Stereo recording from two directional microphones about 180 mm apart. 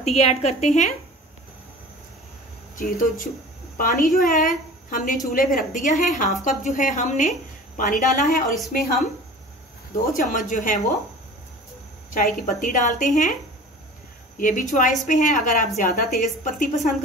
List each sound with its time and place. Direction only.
0.0 s a woman's voice: 35° left (ahead or behind)
2.8 s a woman's voice: 50° left (ahead or behind)
10.1 s a woman's voice: 50° left (ahead or behind)
12.1 s a woman's voice: 50° left (ahead or behind)